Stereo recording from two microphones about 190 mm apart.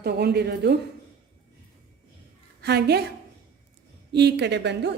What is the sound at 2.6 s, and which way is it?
Speech, 60° right (ahead or behind).